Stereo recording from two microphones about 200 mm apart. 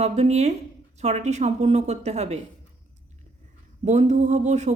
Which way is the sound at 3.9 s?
35° right (ahead or behind).